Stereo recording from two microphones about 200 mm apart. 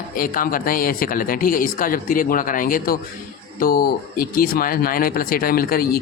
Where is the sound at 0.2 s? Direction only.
45° left (ahead or behind).